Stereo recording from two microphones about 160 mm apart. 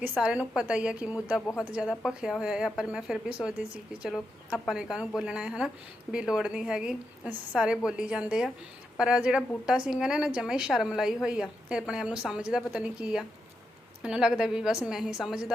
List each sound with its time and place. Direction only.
0.2 s a woman's voice: 5° right (ahead or behind)